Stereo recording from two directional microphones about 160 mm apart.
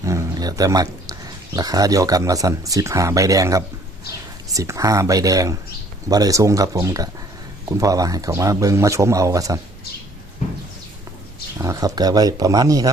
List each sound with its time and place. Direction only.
0.0 s roaring cats: 20° right (ahead or behind)
1.5 s speech: 20° right (ahead or behind)
11.5 s speech: 20° right (ahead or behind)